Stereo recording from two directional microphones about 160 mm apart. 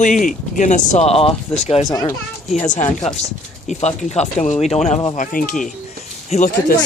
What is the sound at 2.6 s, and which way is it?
Speech, 45° left (ahead or behind).